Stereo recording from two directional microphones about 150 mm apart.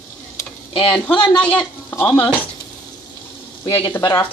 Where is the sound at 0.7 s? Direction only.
35° left (ahead or behind).